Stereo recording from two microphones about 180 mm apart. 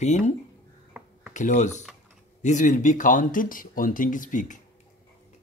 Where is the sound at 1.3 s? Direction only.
40° left (ahead or behind).